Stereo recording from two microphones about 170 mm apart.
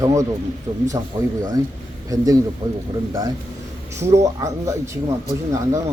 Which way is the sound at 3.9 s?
15° right (ahead or behind).